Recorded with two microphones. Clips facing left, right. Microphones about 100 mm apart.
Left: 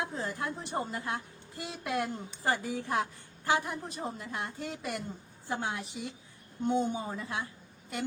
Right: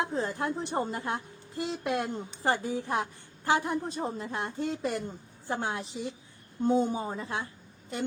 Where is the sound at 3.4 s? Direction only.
30° right (ahead or behind).